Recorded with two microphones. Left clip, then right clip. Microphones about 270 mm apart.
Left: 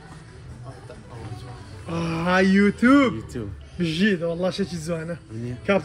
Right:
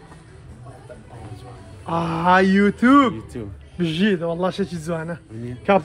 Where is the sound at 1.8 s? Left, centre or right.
Centre.